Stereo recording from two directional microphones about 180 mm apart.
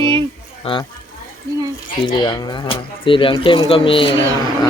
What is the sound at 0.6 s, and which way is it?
Speech, 30° left (ahead or behind).